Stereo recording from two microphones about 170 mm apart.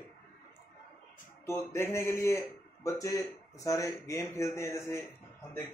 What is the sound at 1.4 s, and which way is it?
Speech, 15° left (ahead or behind).